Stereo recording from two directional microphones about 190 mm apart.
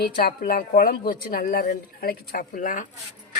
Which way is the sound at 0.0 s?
55° left (ahead or behind).